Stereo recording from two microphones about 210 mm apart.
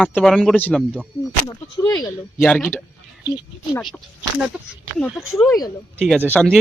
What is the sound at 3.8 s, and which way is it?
A man's voice, 5° left (ahead or behind).